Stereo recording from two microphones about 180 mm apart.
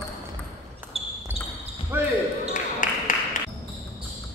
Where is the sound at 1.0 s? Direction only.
35° right (ahead or behind).